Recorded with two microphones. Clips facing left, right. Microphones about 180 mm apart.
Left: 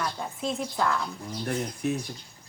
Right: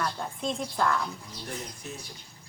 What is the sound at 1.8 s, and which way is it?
Speech, 60° left (ahead or behind).